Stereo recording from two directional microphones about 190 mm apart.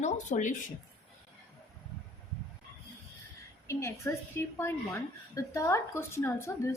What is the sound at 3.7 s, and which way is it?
A woman's voice, 15° left (ahead or behind).